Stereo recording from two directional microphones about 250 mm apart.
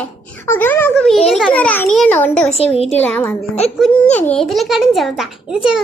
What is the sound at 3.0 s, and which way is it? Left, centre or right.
A woman's voice, centre.